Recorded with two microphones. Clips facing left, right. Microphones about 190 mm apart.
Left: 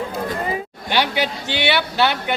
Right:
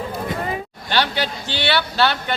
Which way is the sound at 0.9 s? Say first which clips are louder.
Left 1 dB; 15° left (ahead or behind).